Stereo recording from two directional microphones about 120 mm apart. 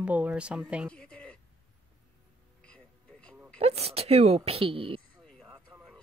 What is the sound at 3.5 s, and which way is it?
A woman's voice, 60° right (ahead or behind).